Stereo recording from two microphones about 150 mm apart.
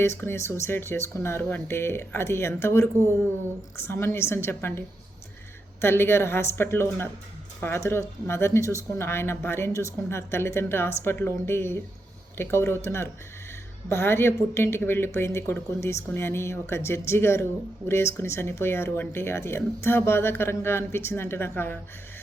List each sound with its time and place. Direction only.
0.0 s speech: 15° left (ahead or behind)
5.8 s speech: 15° left (ahead or behind)